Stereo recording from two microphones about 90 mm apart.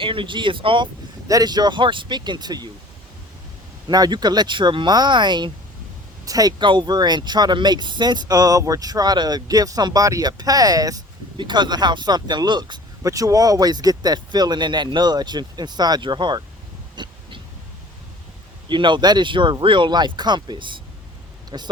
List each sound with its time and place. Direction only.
0.0 s speech: 70° right (ahead or behind)
1.3 s speech: 45° right (ahead or behind)
3.8 s speech: 50° right (ahead or behind)
6.2 s speech: 45° right (ahead or behind)
6.6 s speech: 60° right (ahead or behind); by 11.0 s 45° right (ahead or behind)
11.3 s speech: 55° right (ahead or behind)
13.0 s speech: 40° right (ahead or behind); by 16.4 s 60° right (ahead or behind)
17.0 s dog: 55° right (ahead or behind)
18.7 s speech: 60° right (ahead or behind)
21.5 s speech: 50° right (ahead or behind)